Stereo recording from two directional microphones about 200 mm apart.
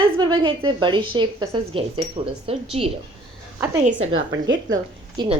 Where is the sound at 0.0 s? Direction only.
25° right (ahead or behind).